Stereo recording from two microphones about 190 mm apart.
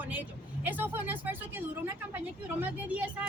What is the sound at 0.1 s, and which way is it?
A woman's voice, 10° right (ahead or behind).